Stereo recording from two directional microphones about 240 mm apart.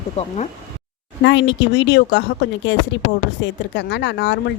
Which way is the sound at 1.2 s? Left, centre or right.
Left.